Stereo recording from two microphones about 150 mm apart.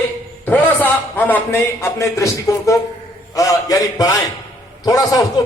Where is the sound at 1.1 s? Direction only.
10° left (ahead or behind).